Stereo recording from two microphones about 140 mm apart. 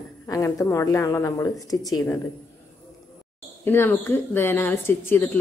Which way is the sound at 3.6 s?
15° left (ahead or behind).